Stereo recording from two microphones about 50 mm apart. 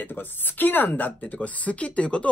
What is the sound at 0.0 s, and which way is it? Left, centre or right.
Speech, left.